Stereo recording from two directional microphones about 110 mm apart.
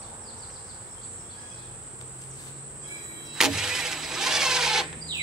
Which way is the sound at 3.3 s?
5° right (ahead or behind).